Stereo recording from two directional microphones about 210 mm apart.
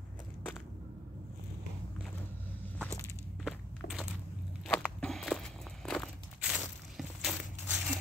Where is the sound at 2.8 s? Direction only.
Centre (ahead or behind).